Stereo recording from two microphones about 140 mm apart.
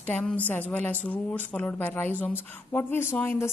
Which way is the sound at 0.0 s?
5° left (ahead or behind).